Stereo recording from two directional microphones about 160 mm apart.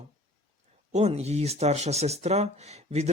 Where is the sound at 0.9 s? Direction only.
45° right (ahead or behind).